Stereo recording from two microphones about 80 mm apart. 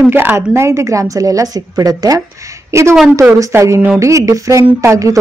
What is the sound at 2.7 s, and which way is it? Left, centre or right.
Speech, right.